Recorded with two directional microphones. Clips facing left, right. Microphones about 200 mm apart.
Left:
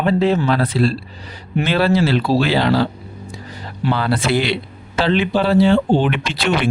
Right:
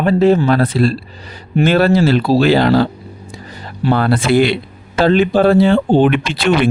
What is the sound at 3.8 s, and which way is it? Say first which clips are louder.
Speech: right 5 dB; 50° right (ahead or behind).